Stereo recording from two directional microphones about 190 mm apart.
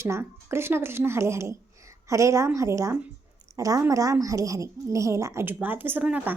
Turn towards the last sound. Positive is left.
turn(degrees=-10)  # may be behind; listen again after turning